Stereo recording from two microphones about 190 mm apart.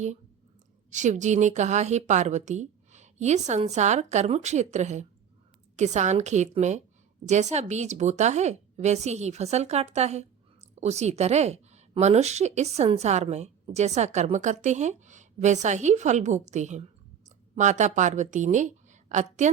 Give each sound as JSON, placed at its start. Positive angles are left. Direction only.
{"t": 0.9, "sound": "a woman's voice", "side_deg": -40}